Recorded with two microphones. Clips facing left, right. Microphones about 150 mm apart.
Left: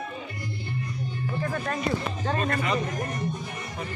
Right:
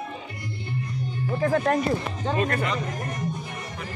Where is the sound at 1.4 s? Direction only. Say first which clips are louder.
Right 10 dB; 60° right (ahead or behind).